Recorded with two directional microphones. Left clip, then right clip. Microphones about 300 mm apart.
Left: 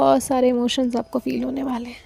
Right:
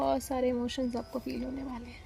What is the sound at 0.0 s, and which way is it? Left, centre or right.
A woman's voice, left.